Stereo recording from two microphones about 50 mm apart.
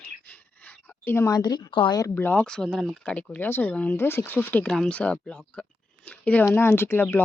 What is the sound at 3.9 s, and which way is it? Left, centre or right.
Speech, left.